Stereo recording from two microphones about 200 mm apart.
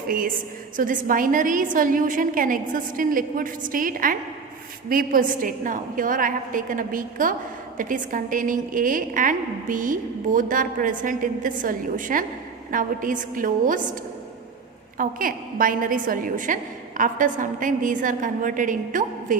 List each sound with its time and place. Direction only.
0.8 s a woman's voice: 45° right (ahead or behind)
14.9 s a woman's voice: 45° right (ahead or behind)